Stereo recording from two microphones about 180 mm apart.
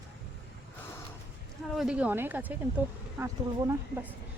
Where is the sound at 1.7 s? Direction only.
5° right (ahead or behind).